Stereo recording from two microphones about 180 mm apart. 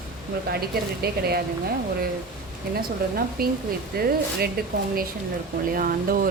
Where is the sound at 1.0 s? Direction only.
60° right (ahead or behind).